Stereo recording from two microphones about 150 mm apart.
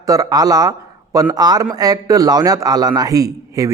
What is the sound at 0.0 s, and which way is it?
Speech, 25° right (ahead or behind).